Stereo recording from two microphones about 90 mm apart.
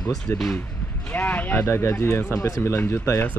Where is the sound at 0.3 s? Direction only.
20° left (ahead or behind).